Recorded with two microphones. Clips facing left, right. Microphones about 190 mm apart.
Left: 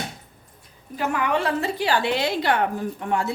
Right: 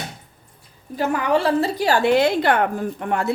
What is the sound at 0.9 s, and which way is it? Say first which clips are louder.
A woman's voice: right 4 dB; 35° right (ahead or behind).